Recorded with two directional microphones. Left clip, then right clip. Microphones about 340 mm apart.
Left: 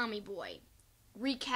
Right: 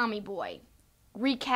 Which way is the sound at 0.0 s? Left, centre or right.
Centre.